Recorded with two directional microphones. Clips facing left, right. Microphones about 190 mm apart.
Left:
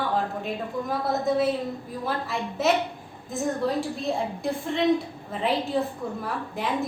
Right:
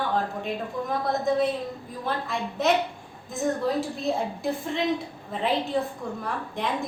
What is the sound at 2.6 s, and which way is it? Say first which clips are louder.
A woman's voice: even; centre (ahead or behind).